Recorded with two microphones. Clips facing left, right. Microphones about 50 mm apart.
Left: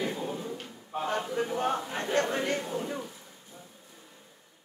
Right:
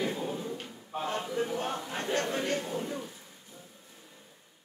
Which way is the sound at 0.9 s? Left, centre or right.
Left.